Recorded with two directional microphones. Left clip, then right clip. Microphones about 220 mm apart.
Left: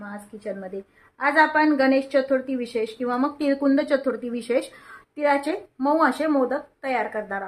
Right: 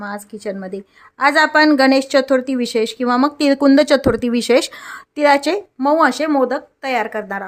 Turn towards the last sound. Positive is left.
turn(degrees=-45)  # may be behind; listen again after turning